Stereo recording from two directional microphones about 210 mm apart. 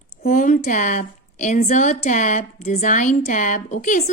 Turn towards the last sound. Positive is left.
turn(degrees=40)  # may be behind; listen again after turning